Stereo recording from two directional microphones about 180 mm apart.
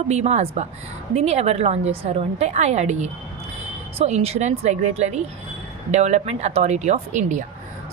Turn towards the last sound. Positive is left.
turn(degrees=-40)  # may be behind; listen again after turning